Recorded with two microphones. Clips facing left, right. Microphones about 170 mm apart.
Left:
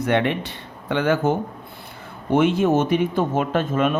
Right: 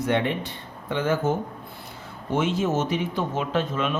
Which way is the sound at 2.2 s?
60° left (ahead or behind).